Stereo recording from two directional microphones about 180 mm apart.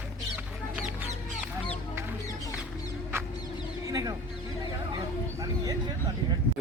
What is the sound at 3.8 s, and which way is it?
Bird, 20° right (ahead or behind).